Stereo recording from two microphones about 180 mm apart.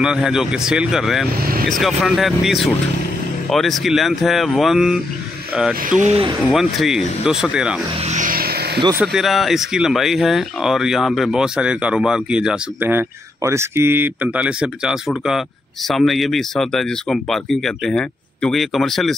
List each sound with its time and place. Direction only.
0.0 s speech: 5° right (ahead or behind)
1.4 s speech: 55° right (ahead or behind)
1.7 s speech: centre (ahead or behind)
5.9 s speech: 40° right (ahead or behind)
6.5 s speech: centre (ahead or behind)
8.0 s vehicle: 45° right (ahead or behind); by 8.8 s 60° right (ahead or behind)
9.0 s speech: centre (ahead or behind)